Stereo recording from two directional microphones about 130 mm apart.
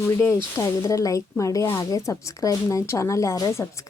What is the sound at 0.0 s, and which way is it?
A woman's voice, 20° left (ahead or behind).